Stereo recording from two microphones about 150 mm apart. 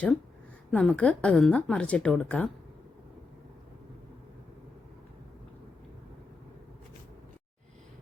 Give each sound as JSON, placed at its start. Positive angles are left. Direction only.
{"t": 0.7, "sound": "a woman's voice", "side_deg": 5}